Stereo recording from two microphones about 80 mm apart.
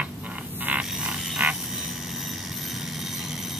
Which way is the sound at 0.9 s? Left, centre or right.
Centre.